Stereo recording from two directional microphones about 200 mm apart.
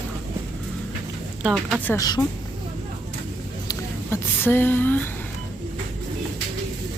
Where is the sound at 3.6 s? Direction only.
10° left (ahead or behind).